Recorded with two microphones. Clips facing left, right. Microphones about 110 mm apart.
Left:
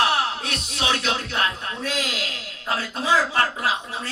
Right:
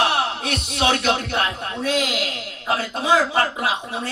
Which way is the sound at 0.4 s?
55° right (ahead or behind).